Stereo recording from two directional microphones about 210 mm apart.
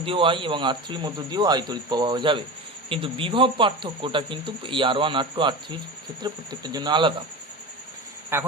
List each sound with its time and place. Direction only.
0.0 s speech: 25° right (ahead or behind)
8.3 s speech: 10° right (ahead or behind)